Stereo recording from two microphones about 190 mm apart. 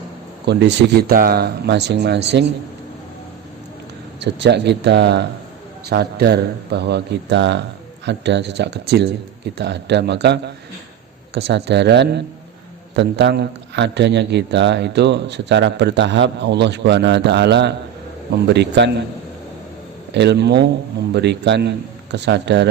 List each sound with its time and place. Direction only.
0.4 s a man's voice: 60° right (ahead or behind)
4.2 s a man's voice: 65° right (ahead or behind)
20.1 s a man's voice: 65° right (ahead or behind)